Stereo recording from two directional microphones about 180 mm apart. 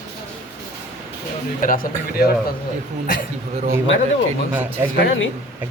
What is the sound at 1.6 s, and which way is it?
Speech, 50° left (ahead or behind).